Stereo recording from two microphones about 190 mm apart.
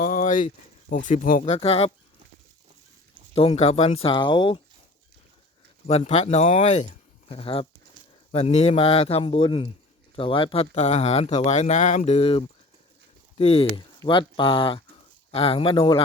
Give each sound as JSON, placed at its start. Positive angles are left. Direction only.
{"t": 0.0, "sound": "a sound", "side_deg": 45}
{"t": 0.9, "sound": "speech", "side_deg": 45}
{"t": 3.3, "sound": "speech", "side_deg": 30}
{"t": 5.9, "sound": "speech", "side_deg": 35}